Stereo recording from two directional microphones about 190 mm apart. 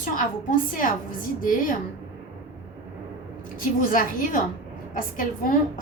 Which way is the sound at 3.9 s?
45° left (ahead or behind).